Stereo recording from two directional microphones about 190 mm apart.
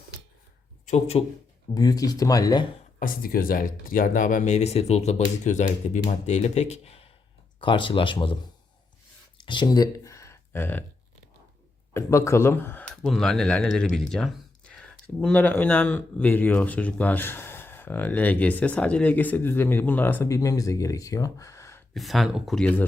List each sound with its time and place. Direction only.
0.9 s speech: 35° left (ahead or behind)
1.7 s speech: 20° left (ahead or behind)
3.0 s speech: 50° left (ahead or behind); by 8.4 s 25° left (ahead or behind)
9.4 s a sound: 25° left (ahead or behind)
11.9 s speech: 15° left (ahead or behind)
21.9 s speech: centre (ahead or behind)